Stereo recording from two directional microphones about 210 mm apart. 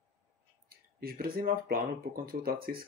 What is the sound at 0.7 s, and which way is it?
Speech, 45° right (ahead or behind).